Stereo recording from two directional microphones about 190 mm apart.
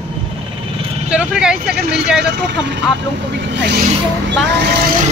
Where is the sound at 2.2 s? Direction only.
65° right (ahead or behind).